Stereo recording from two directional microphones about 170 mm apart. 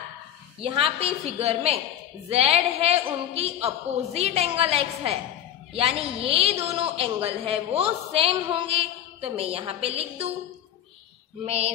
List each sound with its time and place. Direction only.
0.6 s a man's voice: 35° right (ahead or behind)
11.4 s a man's voice: 40° right (ahead or behind)